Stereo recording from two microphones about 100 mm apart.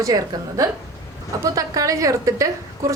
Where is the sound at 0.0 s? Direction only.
35° right (ahead or behind).